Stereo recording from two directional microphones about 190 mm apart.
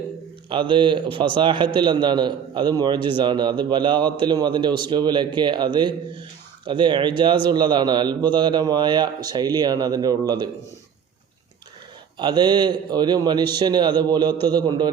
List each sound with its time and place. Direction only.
0.4 s a man's voice: 25° right (ahead or behind)
12.1 s a man's voice: 20° right (ahead or behind)